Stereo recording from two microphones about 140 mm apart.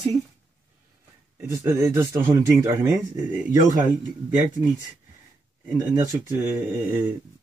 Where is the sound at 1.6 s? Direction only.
15° right (ahead or behind).